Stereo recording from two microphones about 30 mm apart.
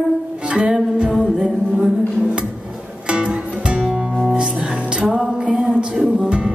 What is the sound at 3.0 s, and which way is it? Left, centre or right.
Music, right.